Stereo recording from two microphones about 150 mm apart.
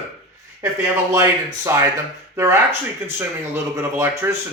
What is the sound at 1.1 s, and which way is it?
Speech, 20° right (ahead or behind).